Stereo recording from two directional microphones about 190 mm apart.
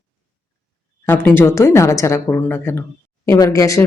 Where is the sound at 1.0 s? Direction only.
10° left (ahead or behind).